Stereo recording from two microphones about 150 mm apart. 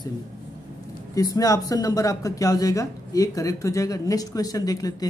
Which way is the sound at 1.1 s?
25° left (ahead or behind).